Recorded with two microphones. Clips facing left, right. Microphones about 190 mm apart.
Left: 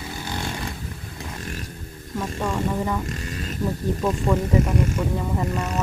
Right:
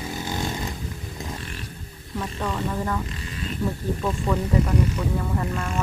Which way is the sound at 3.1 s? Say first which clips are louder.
Left 2 dB; 45° left (ahead or behind).